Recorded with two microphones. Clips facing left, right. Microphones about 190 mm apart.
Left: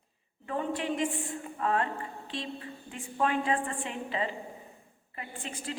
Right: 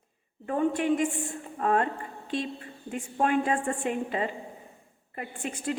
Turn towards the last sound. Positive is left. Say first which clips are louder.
# right 6 dB
turn(degrees=-50)  # may be behind; listen again after turning